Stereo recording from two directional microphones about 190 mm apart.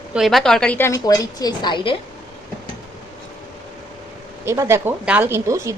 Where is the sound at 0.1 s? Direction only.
Centre (ahead or behind); by 2.0 s 25° left (ahead or behind).